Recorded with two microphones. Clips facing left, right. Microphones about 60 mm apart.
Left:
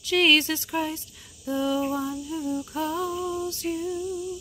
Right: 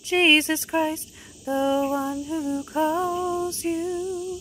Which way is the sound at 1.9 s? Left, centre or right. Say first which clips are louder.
Right 3 dB; centre.